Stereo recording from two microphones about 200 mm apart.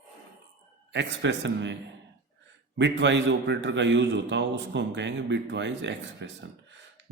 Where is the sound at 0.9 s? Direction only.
65° right (ahead or behind).